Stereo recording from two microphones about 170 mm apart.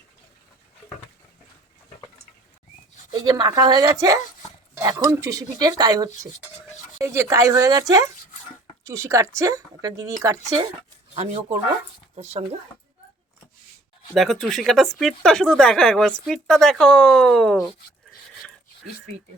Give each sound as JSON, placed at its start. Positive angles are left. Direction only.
{"t": 3.1, "sound": "speech", "side_deg": -25}
{"t": 11.1, "sound": "speech", "side_deg": -35}
{"t": 14.1, "sound": "a woman's voice", "side_deg": 0}